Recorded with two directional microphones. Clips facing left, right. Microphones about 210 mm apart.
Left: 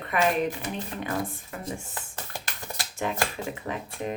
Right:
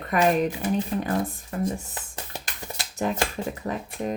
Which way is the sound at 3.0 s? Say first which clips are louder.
Right 3 dB; 40° right (ahead or behind).